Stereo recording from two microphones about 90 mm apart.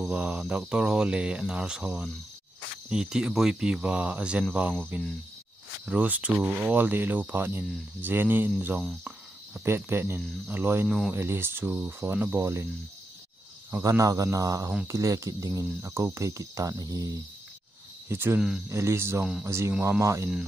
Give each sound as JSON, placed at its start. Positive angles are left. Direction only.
{"t": 0.0, "sound": "speech", "side_deg": -10}
{"t": 9.5, "sound": "speech", "side_deg": -25}
{"t": 13.8, "sound": "speech", "side_deg": -40}
{"t": 18.0, "sound": "speech", "side_deg": -25}